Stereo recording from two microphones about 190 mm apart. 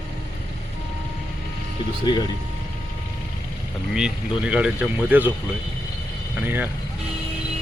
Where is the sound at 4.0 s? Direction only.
5° right (ahead or behind).